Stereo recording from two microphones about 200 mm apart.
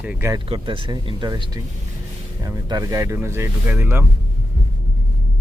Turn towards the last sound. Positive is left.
turn(degrees=-10)  # may be behind; listen again after turning